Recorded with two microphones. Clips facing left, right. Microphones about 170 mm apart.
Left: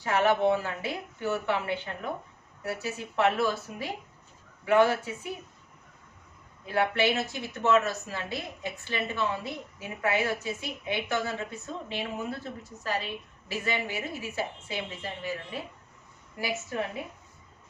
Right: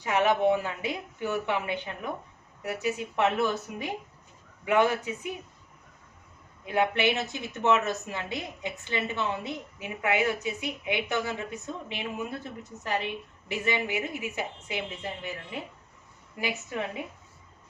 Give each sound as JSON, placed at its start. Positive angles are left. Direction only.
{"t": 0.0, "sound": "a woman's voice", "side_deg": -15}
{"t": 6.7, "sound": "a woman's voice", "side_deg": -20}